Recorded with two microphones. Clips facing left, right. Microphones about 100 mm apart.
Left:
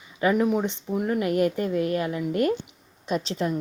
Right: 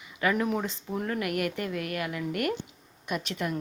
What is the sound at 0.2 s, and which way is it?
A woman's voice, 25° left (ahead or behind).